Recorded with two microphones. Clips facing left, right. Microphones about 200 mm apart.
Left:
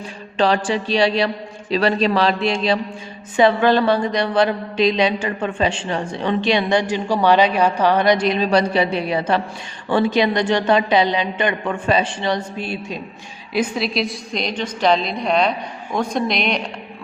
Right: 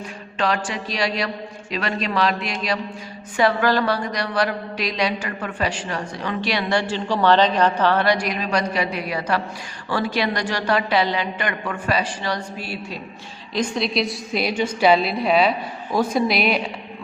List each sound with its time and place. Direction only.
0.3 s a man's voice: 30° left (ahead or behind)
13.5 s a woman's voice: 5° left (ahead or behind)